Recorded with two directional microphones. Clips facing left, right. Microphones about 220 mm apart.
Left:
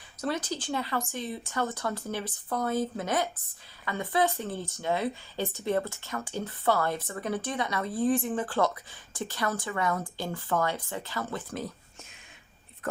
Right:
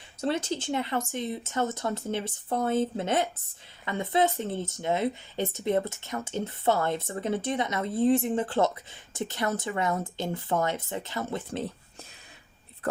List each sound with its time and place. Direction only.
0.2 s speech: 25° right (ahead or behind)
12.8 s speech: 35° right (ahead or behind)